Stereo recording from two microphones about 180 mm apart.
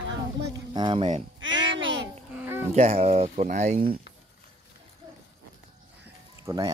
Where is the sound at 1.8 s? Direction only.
90° right.